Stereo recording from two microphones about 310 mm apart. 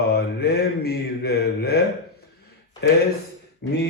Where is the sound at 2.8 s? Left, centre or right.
Left.